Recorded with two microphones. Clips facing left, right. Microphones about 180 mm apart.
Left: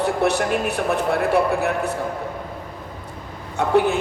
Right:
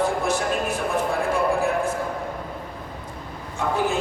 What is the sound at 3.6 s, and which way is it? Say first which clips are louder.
Speech: left 6 dB; 65° left (ahead or behind).